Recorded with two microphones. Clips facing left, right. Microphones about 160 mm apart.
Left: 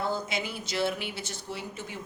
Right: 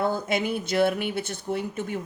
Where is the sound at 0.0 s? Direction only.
55° right (ahead or behind).